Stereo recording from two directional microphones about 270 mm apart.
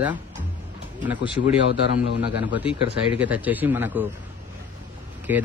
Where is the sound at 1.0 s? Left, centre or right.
Centre.